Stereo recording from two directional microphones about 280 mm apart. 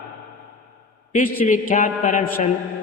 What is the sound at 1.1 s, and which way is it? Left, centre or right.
A man's voice, left.